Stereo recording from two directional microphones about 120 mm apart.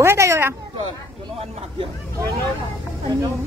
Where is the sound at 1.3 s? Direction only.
55° right (ahead or behind).